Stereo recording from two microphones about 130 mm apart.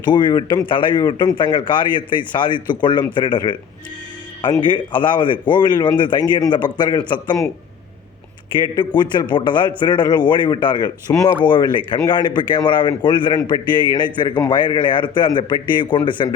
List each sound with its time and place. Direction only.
0.0 s speech: 35° left (ahead or behind)
4.6 s speech: 35° left (ahead or behind)
8.7 s speech: 35° left (ahead or behind)